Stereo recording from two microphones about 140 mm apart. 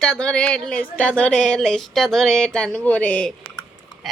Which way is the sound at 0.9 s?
10° left (ahead or behind).